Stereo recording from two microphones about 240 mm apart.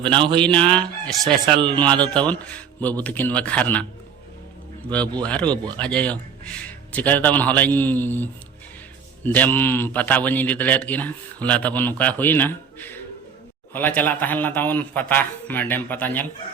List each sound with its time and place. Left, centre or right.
0.0 s a man's voice: centre
0.4 s a man's voice: centre
1.5 s a man's voice: centre
1.7 s a man's voice: centre